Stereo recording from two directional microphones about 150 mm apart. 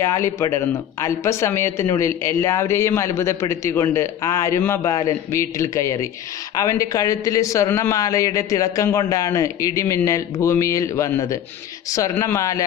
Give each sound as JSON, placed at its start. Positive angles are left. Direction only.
{"t": 0.0, "sound": "speech", "side_deg": 20}